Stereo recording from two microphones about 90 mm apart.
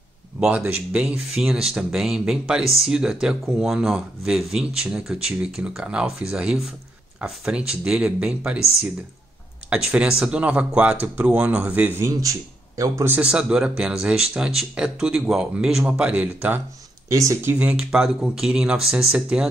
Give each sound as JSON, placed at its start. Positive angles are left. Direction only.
{"t": 0.6, "sound": "speech", "side_deg": -20}
{"t": 1.0, "sound": "speech", "side_deg": -5}
{"t": 12.1, "sound": "speech", "side_deg": -40}
{"t": 13.2, "sound": "speech", "side_deg": -10}
{"t": 17.1, "sound": "speech", "side_deg": -35}
{"t": 17.5, "sound": "speech", "side_deg": -15}